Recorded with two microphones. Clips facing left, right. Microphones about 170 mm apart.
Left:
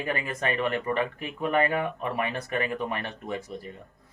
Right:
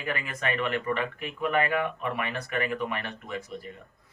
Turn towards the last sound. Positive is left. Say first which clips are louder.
# left 2 dB
turn(degrees=35)  # may be behind; listen again after turning